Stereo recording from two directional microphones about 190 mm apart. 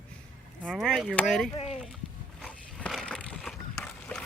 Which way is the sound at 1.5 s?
30° left (ahead or behind).